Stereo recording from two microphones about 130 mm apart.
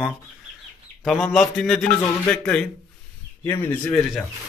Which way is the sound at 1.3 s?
5° left (ahead or behind).